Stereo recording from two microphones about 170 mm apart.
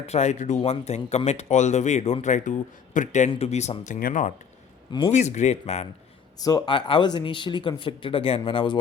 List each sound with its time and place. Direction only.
0.1 s speech: 45° left (ahead or behind)
4.9 s speech: 25° left (ahead or behind)
5.1 s speech: 45° left (ahead or behind)
6.4 s speech: 20° left (ahead or behind)